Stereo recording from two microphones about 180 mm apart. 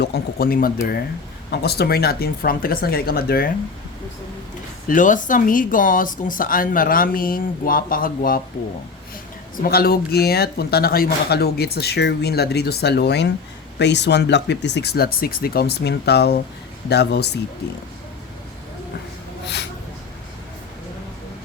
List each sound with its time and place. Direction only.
0.0 s speech: 60° left (ahead or behind)
4.9 s speech: 45° left (ahead or behind)
9.6 s speech: 55° left (ahead or behind)